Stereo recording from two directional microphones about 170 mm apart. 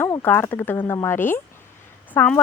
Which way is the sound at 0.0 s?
10° left (ahead or behind).